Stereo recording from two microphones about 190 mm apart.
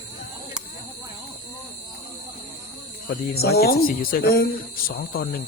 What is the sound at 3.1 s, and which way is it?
Speech, 55° left (ahead or behind).